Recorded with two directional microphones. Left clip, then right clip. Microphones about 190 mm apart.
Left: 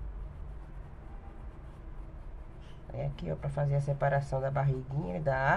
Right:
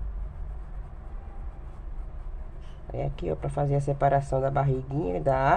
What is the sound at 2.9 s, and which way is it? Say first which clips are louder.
Speech: right 7 dB; 35° right (ahead or behind).